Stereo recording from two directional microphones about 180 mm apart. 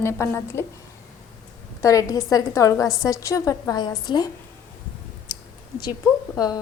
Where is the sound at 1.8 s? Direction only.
20° left (ahead or behind).